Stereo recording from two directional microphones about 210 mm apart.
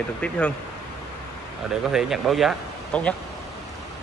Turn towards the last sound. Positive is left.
turn(degrees=5)  # may be behind; listen again after turning